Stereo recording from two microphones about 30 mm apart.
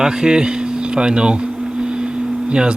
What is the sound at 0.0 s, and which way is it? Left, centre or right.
Speech, right.